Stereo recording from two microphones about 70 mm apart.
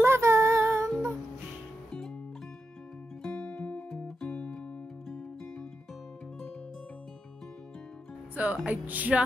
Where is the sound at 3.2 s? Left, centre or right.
Centre.